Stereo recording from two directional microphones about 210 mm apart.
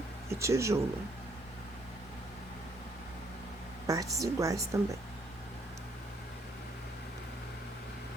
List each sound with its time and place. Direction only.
0.3 s speech: 15° right (ahead or behind)
3.8 s a woman's voice: 15° right (ahead or behind)